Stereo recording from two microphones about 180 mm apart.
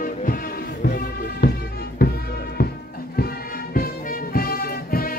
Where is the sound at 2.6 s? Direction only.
60° left (ahead or behind).